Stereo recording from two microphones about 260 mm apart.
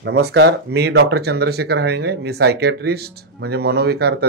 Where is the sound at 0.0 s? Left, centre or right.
Right.